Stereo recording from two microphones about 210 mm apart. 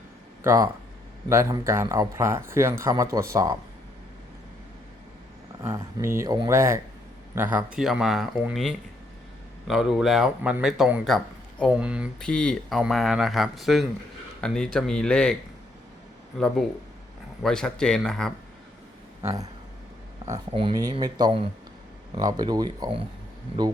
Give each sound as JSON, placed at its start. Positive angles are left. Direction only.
{"t": 0.4, "sound": "speech", "side_deg": -15}
{"t": 5.6, "sound": "speech", "side_deg": -10}
{"t": 17.4, "sound": "speech", "side_deg": 5}
{"t": 19.2, "sound": "speech", "side_deg": -15}
{"t": 20.5, "sound": "speech", "side_deg": -25}